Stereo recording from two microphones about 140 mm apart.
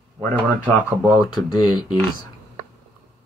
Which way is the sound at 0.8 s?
10° right (ahead or behind).